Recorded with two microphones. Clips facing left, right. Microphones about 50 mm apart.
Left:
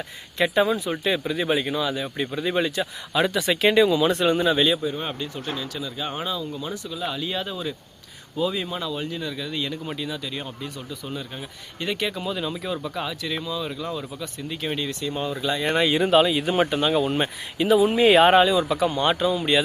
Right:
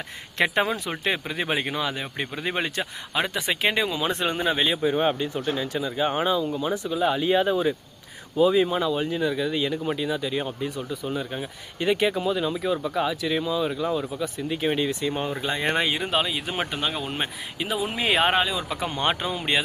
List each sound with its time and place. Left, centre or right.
0.3 s speech: right
3.2 s speech: right
5.0 s speech: centre
15.1 s speech: right
16.0 s speech: centre
18.8 s speech: right